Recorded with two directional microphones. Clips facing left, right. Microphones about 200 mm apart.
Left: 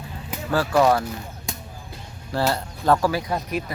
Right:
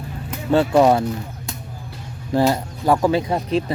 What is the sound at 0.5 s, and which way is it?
Speech, 25° right (ahead or behind).